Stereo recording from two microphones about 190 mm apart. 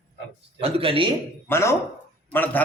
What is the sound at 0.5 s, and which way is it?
Speech, 30° right (ahead or behind).